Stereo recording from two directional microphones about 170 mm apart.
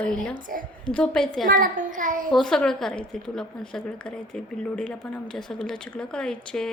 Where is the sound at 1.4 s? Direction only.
55° right (ahead or behind).